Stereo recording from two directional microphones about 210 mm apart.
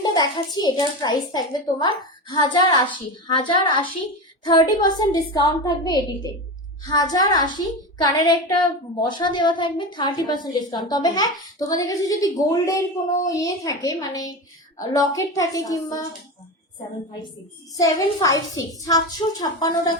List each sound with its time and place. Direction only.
0.0 s a woman's voice: 20° left (ahead or behind)
17.7 s a woman's voice: 15° left (ahead or behind)